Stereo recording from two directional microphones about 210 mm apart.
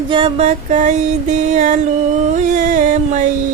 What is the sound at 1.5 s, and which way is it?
Music, 35° right (ahead or behind).